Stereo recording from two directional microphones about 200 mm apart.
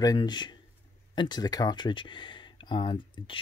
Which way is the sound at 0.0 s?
20° left (ahead or behind).